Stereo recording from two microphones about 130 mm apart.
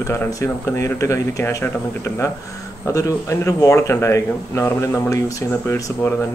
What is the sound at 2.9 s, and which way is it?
A man's voice, 25° left (ahead or behind).